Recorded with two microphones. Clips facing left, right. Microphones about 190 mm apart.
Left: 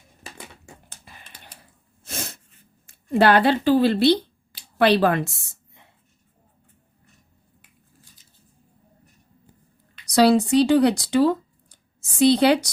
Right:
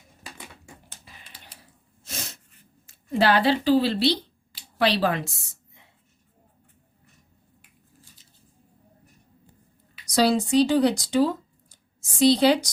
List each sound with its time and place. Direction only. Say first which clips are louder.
0.6 s a sound: left 1 dB; 50° left (ahead or behind)
2.0 s sneeze: left 4 dB; 55° left (ahead or behind)
2.8 s speech: left 4 dB; 55° left (ahead or behind)
10.1 s a woman's voice: left 4 dB; 65° left (ahead or behind)